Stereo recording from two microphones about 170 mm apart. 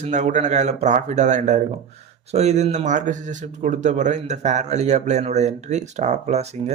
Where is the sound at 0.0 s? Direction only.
45° right (ahead or behind).